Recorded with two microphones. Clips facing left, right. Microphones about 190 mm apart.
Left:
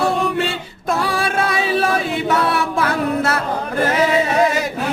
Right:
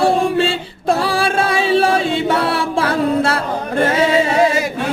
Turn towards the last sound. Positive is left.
turn(degrees=-30)  # may be behind; listen again after turning